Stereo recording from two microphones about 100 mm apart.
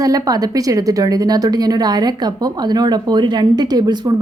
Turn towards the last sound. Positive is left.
turn(degrees=-45)  # may be behind; listen again after turning